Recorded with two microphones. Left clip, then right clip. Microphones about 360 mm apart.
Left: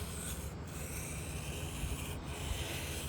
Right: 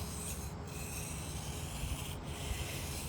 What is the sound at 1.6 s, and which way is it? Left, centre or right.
Rub, centre.